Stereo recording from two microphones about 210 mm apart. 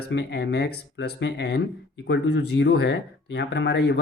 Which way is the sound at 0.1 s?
55° left (ahead or behind).